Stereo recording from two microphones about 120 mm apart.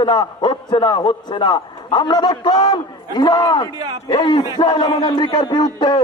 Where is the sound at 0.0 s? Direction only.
40° left (ahead or behind).